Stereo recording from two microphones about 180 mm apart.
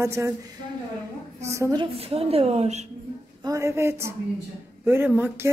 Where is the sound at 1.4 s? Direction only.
15° right (ahead or behind).